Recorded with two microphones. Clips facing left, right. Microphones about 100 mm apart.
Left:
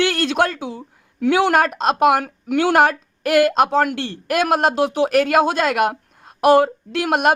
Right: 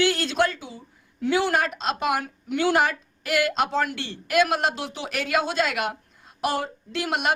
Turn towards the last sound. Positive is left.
turn(degrees=55)  # may be behind; listen again after turning